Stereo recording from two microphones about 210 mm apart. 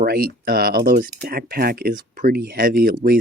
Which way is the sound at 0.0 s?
45° right (ahead or behind).